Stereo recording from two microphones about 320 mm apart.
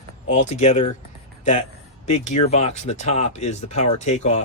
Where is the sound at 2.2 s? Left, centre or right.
Left.